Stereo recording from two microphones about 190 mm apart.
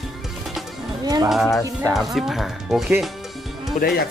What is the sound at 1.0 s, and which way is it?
Speech, 20° right (ahead or behind).